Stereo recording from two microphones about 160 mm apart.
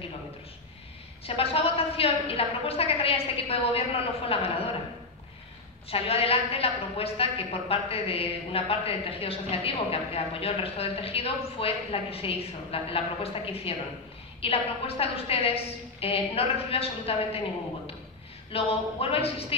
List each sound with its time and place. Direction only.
1.2 s a woman's voice: 35° left (ahead or behind)
5.9 s a woman's voice: 35° left (ahead or behind)
18.5 s a woman's voice: 40° left (ahead or behind)